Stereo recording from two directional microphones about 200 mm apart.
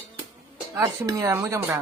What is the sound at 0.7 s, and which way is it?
Speech, 15° right (ahead or behind).